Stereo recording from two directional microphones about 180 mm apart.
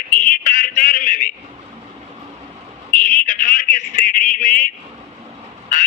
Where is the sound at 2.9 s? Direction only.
50° left (ahead or behind).